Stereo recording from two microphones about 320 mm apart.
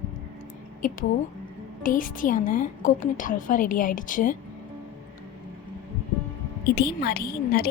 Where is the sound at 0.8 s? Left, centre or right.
Left.